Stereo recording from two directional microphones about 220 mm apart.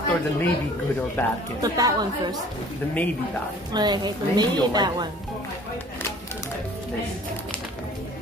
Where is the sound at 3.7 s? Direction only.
20° right (ahead or behind).